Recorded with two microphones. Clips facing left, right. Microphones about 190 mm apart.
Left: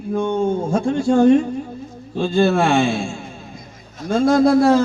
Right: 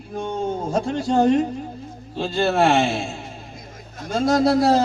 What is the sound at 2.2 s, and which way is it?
Speech, 50° left (ahead or behind).